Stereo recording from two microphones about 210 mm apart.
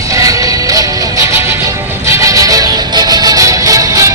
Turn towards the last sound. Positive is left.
turn(degrees=-15)  # may be behind; listen again after turning